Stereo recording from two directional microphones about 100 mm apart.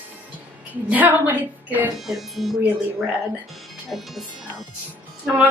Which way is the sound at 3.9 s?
Centre (ahead or behind).